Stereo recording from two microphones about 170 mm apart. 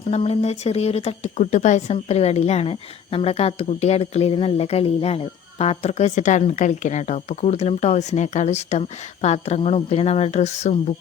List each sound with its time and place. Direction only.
0.1 s speech: 40° left (ahead or behind)